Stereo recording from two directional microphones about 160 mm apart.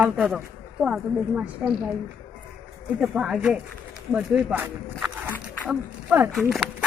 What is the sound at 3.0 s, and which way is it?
Speech, 5° right (ahead or behind).